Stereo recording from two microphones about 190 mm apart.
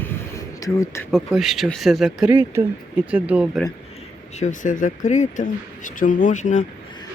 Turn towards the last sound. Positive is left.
turn(degrees=40)  # may be behind; listen again after turning